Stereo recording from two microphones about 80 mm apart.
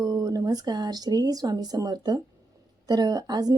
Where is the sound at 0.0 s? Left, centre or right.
Right.